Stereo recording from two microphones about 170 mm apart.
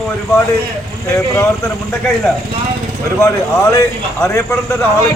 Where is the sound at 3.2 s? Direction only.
20° left (ahead or behind).